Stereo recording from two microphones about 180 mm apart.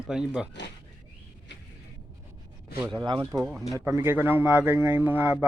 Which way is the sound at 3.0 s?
25° right (ahead or behind).